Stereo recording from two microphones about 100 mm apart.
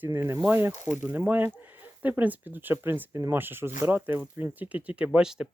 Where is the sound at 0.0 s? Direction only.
25° right (ahead or behind).